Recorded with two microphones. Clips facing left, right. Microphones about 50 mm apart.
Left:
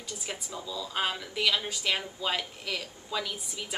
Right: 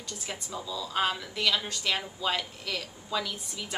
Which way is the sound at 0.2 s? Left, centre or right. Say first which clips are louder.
Right 2 dB; centre.